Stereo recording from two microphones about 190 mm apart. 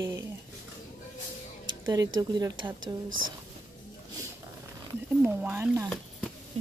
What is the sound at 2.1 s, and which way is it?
Speech, 20° right (ahead or behind).